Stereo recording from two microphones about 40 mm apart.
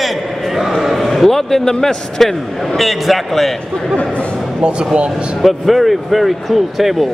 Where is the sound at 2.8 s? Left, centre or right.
Centre.